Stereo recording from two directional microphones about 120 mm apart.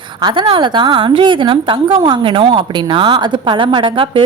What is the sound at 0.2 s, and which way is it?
A woman's voice, 40° right (ahead or behind).